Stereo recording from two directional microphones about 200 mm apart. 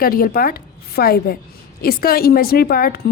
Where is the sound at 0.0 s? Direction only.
45° left (ahead or behind).